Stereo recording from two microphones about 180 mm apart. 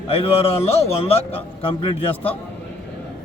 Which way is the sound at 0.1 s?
35° left (ahead or behind).